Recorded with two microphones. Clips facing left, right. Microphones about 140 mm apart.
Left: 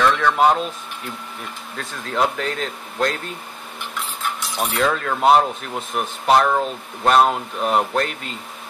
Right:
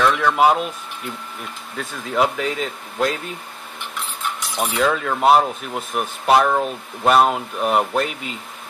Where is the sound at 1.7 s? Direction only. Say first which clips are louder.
Right 2 dB; 5° right (ahead or behind).